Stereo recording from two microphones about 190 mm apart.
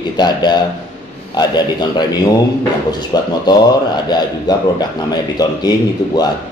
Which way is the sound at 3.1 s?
20° left (ahead or behind).